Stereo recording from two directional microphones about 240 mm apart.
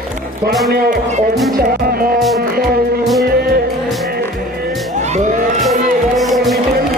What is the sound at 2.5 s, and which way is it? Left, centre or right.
Music, right.